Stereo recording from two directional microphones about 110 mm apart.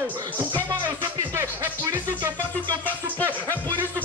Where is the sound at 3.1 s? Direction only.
15° left (ahead or behind).